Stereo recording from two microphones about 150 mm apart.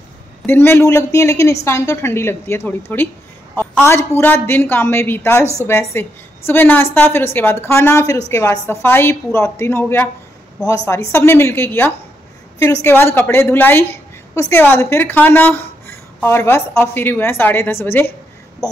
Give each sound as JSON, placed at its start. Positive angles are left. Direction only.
{"t": 0.5, "sound": "a woman's voice", "side_deg": 15}